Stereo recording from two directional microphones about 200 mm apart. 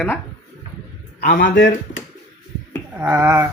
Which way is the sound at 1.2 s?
45° left (ahead or behind).